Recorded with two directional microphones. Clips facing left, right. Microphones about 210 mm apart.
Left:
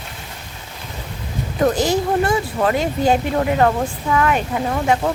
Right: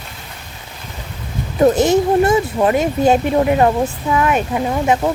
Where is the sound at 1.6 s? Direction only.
25° right (ahead or behind).